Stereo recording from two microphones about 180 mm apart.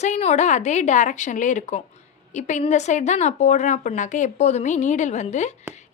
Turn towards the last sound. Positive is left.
turn(degrees=40)  # may be behind; listen again after turning